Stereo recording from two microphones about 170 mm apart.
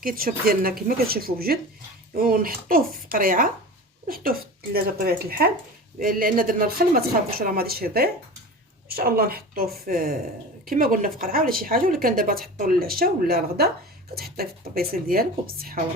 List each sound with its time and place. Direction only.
0.0 s a woman's voice: 55° right (ahead or behind)